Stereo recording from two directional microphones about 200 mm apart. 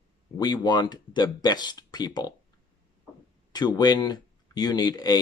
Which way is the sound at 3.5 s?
20° left (ahead or behind).